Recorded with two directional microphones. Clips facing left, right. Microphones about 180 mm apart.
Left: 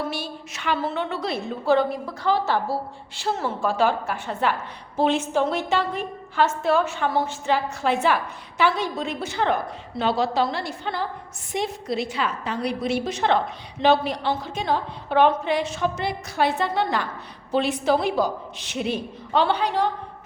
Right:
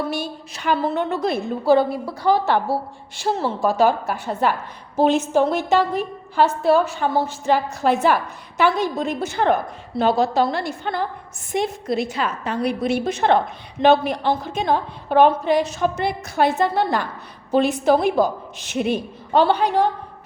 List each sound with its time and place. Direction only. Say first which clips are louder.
0.5 s a woman's voice: right 4 dB; 40° right (ahead or behind)
3.2 s a woman's voice: right 4 dB; 40° right (ahead or behind)